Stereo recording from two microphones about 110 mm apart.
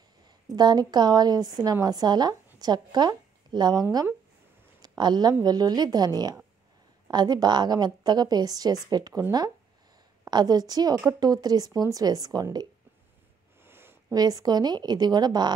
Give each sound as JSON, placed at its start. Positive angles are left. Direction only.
{"t": 0.5, "sound": "a woman's voice", "side_deg": -40}
{"t": 4.8, "sound": "a woman's voice", "side_deg": -40}
{"t": 10.2, "sound": "a woman's voice", "side_deg": -35}
{"t": 13.6, "sound": "a sound", "side_deg": -20}
{"t": 14.1, "sound": "a woman's voice", "side_deg": -35}